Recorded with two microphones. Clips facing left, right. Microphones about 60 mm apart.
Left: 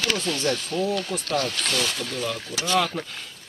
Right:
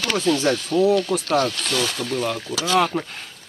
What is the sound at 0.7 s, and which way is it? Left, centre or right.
Speech, right.